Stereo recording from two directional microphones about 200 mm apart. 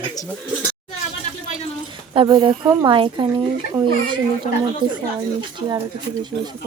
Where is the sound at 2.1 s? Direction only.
25° right (ahead or behind).